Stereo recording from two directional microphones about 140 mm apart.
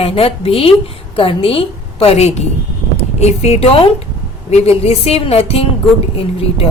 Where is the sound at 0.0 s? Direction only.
45° left (ahead or behind).